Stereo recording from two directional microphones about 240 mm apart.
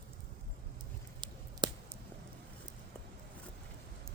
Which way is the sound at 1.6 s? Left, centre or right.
Centre.